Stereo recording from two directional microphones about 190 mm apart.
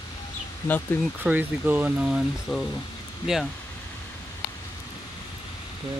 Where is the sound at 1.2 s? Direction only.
10° right (ahead or behind).